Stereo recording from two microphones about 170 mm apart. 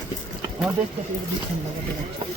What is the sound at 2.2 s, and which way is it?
Speech, 30° right (ahead or behind).